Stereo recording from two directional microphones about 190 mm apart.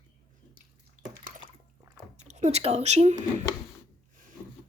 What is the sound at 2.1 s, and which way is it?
Speech, 35° right (ahead or behind).